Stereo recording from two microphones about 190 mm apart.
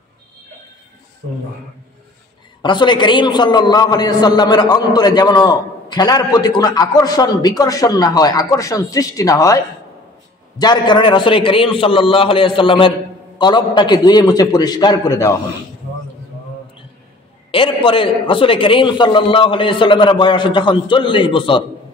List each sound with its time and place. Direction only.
2.6 s a man's voice: 25° left (ahead or behind)
10.6 s a man's voice: 25° left (ahead or behind)
17.5 s a man's voice: 25° left (ahead or behind)